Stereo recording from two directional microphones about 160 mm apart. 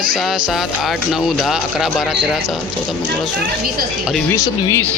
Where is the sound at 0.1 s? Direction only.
5° right (ahead or behind).